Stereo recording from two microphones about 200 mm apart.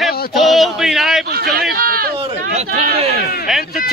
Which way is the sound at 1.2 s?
50° right (ahead or behind).